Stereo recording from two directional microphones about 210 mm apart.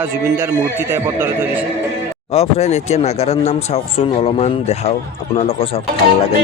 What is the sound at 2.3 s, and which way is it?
Speech, 30° left (ahead or behind).